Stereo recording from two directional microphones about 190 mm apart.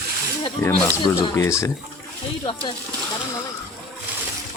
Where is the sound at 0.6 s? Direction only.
15° left (ahead or behind).